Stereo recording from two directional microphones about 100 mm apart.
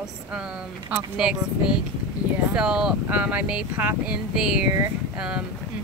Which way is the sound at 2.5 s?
5° right (ahead or behind).